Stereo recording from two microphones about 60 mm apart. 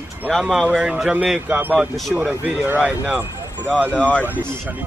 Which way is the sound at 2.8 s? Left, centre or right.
Right.